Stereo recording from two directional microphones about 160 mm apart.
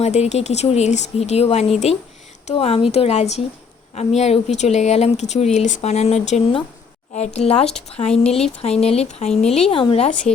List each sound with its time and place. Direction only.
0.0 s speech: 45° left (ahead or behind)